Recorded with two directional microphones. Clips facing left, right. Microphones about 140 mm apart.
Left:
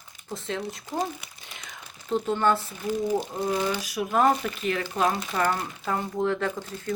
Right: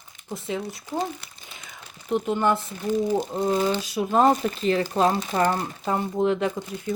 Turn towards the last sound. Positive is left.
turn(degrees=-15)  # may be behind; listen again after turning